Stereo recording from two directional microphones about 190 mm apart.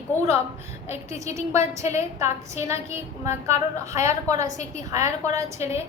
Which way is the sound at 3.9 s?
15° right (ahead or behind).